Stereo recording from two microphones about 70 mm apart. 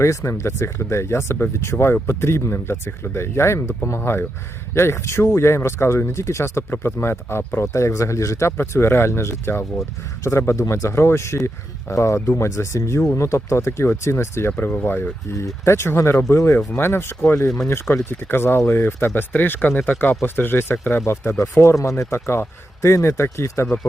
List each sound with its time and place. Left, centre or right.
0.0 s speech: left
14.5 s speech: left
15.6 s speech: left
21.1 s speech: left